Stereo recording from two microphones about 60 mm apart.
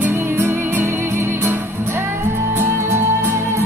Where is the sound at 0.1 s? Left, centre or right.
Right.